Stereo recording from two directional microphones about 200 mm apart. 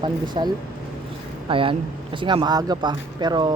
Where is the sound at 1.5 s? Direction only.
25° right (ahead or behind).